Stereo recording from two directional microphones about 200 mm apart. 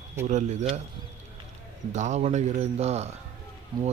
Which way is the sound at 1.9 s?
35° right (ahead or behind).